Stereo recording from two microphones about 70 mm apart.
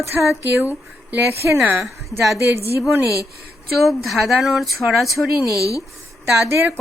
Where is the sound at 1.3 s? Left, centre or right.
Right.